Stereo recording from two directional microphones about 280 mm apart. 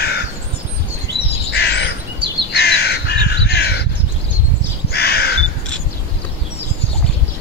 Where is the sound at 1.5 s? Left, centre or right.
Left.